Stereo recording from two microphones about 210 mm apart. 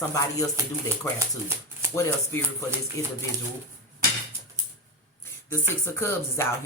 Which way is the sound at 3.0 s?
15° left (ahead or behind).